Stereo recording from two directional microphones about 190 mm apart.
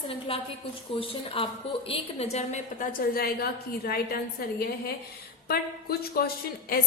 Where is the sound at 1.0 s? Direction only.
30° left (ahead or behind).